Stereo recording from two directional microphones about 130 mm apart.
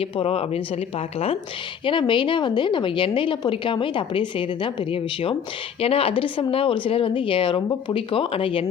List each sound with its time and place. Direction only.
0.0 s speech: 45° left (ahead or behind)
1.8 s a woman's voice: 40° left (ahead or behind)